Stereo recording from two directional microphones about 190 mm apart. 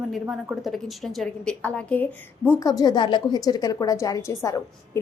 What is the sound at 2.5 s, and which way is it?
A woman's voice, 20° left (ahead or behind).